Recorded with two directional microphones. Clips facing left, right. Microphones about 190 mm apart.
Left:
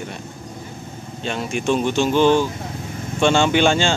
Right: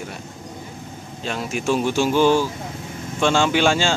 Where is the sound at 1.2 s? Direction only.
Centre (ahead or behind).